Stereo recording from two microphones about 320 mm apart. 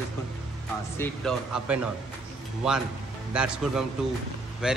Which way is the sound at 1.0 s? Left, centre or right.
Centre.